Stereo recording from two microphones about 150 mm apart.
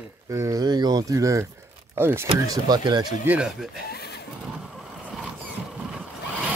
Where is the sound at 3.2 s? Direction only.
10° right (ahead or behind).